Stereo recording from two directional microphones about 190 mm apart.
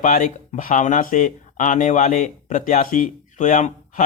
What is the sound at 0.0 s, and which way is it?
Speech, 45° left (ahead or behind).